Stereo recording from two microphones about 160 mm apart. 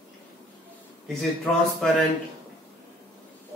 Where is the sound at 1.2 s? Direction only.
5° left (ahead or behind).